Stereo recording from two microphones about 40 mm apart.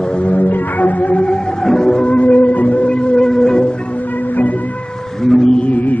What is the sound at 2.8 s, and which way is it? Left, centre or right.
Music, left.